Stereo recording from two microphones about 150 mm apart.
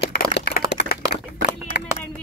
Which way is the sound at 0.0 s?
90° left.